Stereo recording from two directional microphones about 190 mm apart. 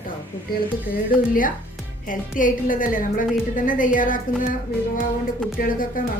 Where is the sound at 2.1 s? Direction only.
45° left (ahead or behind).